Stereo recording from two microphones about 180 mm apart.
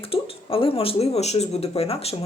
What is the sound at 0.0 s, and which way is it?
A woman's voice, 30° left (ahead or behind).